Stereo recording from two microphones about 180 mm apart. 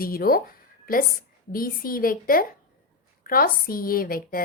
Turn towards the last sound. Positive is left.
turn(degrees=55)  # may be behind; listen again after turning